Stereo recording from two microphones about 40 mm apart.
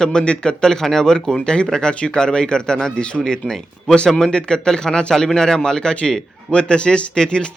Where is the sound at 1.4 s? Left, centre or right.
Left.